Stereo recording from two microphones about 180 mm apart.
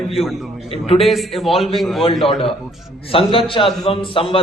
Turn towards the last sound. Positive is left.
turn(degrees=30)  # may be behind; listen again after turning